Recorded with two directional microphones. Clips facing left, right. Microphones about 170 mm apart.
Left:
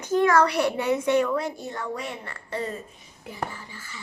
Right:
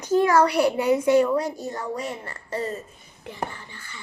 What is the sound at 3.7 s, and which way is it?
Speech, 5° left (ahead or behind).